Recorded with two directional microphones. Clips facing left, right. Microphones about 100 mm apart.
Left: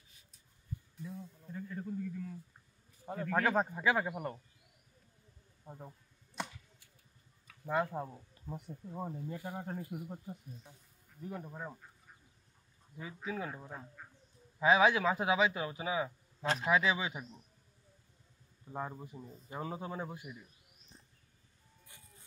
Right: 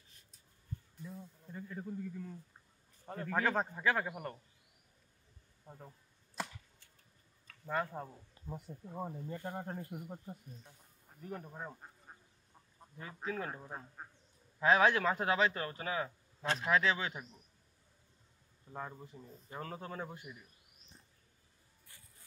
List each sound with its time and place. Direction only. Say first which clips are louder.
1.0 s speech: left 5 dB; centre (ahead or behind)
3.4 s a man's voice: left 2 dB; 10° left (ahead or behind)
5.7 s a man's voice: left 4 dB; 15° left (ahead or behind)
6.4 s a sound: even; centre (ahead or behind)
7.4 s speech: left 3 dB; 15° left (ahead or behind)
8.5 s speech: left 1 dB; centre (ahead or behind)
11.8 s duck: right 3 dB; 50° right (ahead or behind)
12.9 s a man's voice: even; 5° left (ahead or behind)
14.0 s a sound: right 3 dB; 40° right (ahead or behind)
14.6 s a man's voice: left 1 dB; 5° left (ahead or behind)
18.7 s a man's voice: left 4 dB; 15° left (ahead or behind)